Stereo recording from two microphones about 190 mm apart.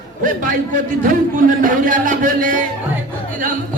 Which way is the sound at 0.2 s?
45° right (ahead or behind).